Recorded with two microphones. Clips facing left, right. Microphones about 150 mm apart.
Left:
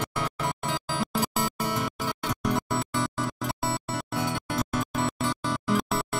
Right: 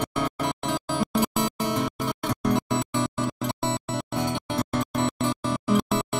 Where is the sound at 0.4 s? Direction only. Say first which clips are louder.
Right 3 dB; centre (ahead or behind).